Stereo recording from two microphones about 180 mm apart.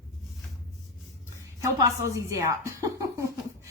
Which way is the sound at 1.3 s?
15° right (ahead or behind).